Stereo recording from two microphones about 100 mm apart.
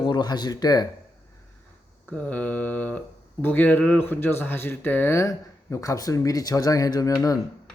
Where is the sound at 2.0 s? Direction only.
15° left (ahead or behind).